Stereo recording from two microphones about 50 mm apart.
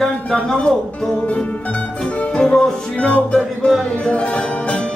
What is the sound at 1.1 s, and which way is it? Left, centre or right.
Music, left.